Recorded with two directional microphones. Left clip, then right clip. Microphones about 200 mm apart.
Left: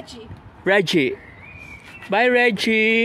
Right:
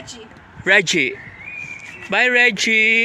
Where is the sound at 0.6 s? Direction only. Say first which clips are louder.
Right 3 dB; 15° left (ahead or behind).